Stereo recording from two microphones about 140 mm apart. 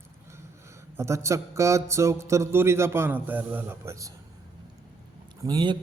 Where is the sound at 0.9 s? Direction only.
20° right (ahead or behind).